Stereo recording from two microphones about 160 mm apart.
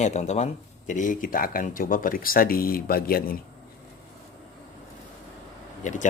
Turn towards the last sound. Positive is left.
turn(degrees=50)  # may be behind; listen again after turning